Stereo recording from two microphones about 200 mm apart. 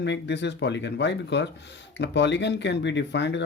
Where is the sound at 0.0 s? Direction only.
60° left (ahead or behind).